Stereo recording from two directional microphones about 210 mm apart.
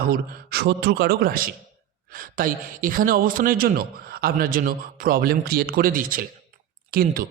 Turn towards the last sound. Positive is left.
turn(degrees=-45)  # may be behind; listen again after turning